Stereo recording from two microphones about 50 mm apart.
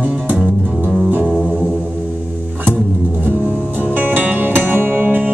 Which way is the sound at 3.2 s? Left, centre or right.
Right.